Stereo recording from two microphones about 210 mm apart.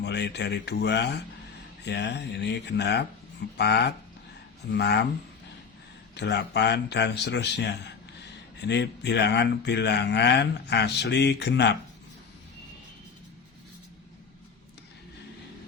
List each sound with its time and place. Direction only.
0.0 s speech: 55° left (ahead or behind)
6.1 s a man's voice: 55° left (ahead or behind)